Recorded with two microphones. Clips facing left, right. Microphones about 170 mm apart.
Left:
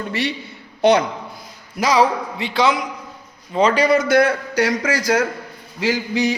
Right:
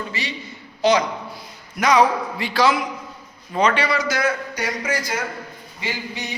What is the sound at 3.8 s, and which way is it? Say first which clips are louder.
A man's voice: left 7 dB; 55° left (ahead or behind).